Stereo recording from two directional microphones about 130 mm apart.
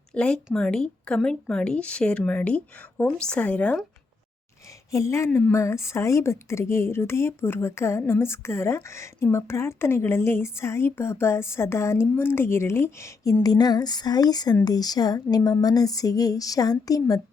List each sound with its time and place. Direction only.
0.1 s speech: 5° left (ahead or behind)
4.9 s a woman's voice: 25° left (ahead or behind)